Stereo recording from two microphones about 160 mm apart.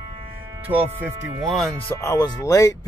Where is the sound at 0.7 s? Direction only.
30° right (ahead or behind).